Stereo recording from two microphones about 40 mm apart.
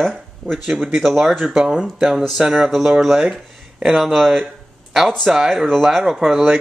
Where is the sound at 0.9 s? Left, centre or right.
Centre.